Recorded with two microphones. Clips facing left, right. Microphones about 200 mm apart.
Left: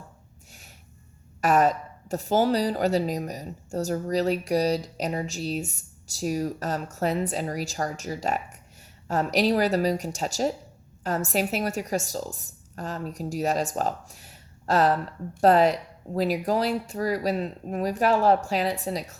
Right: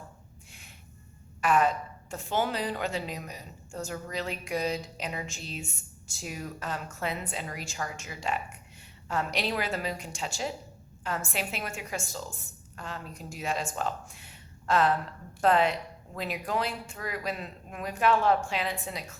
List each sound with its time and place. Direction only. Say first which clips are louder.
1.4 s a woman's voice: left 4 dB; 40° left (ahead or behind)